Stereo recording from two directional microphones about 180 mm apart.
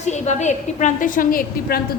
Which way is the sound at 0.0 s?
40° left (ahead or behind).